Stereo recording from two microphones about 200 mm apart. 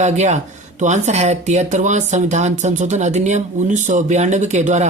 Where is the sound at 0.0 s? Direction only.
35° right (ahead or behind).